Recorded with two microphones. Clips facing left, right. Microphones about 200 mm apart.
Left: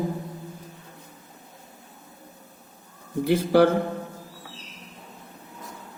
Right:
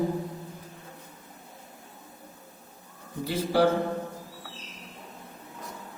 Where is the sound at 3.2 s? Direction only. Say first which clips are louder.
Left 6 dB; 60° left (ahead or behind).